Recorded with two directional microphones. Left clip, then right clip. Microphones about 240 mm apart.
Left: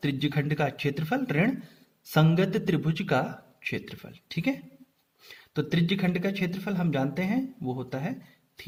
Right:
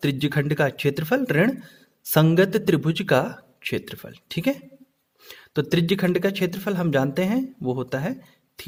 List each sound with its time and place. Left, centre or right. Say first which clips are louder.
0.0 s speech: right 5 dB; right